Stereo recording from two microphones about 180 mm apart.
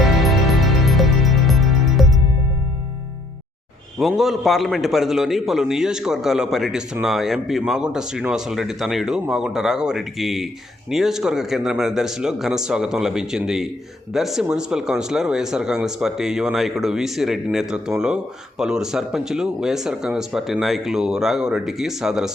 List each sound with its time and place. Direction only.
0.0 s music: centre (ahead or behind)
3.9 s speech: centre (ahead or behind)